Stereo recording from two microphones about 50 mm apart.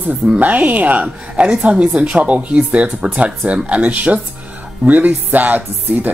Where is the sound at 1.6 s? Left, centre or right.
Right.